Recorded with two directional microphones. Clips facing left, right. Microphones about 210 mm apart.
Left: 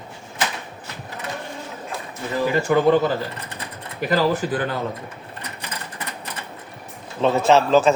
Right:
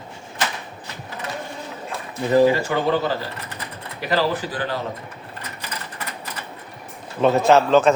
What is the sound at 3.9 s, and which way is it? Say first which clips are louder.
Speech: left 2 dB; 45° left (ahead or behind).